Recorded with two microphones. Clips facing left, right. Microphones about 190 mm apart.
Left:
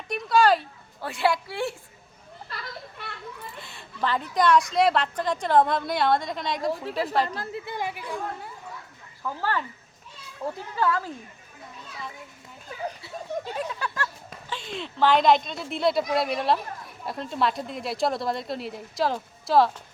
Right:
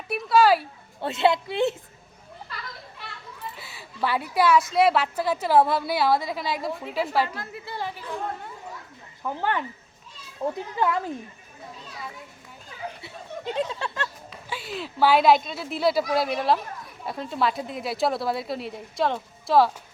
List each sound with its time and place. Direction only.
0.1 s a woman's voice: 5° right (ahead or behind)
1.0 s speech: 20° right (ahead or behind)
3.6 s a woman's voice: 5° right (ahead or behind)
7.3 s a woman's voice: 35° left (ahead or behind)
7.6 s a sound: 15° left (ahead or behind)
9.2 s speech: 20° right (ahead or behind)
13.0 s speech: 20° right (ahead or behind)
14.5 s a woman's voice: 5° right (ahead or behind)